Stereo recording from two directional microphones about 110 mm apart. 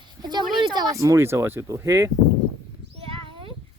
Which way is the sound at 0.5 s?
40° right (ahead or behind).